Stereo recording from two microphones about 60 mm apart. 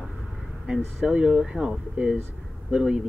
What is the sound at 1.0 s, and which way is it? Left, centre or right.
Speech, centre.